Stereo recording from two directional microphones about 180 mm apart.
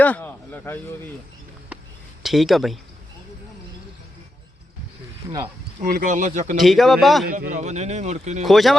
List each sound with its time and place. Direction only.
0.0 s speech: 10° left (ahead or behind)
2.2 s a man's voice: centre (ahead or behind)
5.2 s speech: 15° right (ahead or behind)
5.8 s speech: 50° right (ahead or behind)
6.6 s a man's voice: centre (ahead or behind)
7.3 s speech: 45° right (ahead or behind)
8.4 s a man's voice: centre (ahead or behind)